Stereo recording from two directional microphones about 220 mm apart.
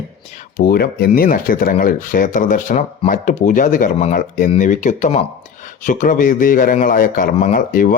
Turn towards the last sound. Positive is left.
turn(degrees=40)  # may be behind; listen again after turning